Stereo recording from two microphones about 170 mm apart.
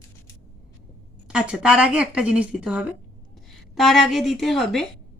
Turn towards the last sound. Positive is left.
turn(degrees=0)  # may be behind; listen again after turning